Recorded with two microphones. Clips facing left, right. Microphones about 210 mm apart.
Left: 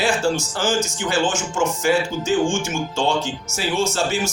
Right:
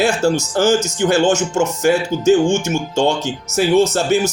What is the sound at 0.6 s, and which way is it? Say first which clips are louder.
Music: right 7 dB; 70° right (ahead or behind).